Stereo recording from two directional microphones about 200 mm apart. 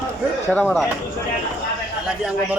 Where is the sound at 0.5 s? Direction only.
5° left (ahead or behind).